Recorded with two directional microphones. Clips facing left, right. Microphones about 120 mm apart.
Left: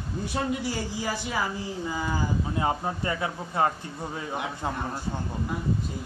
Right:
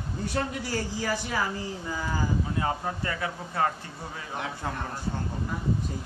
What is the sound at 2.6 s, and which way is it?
Speech, 20° left (ahead or behind).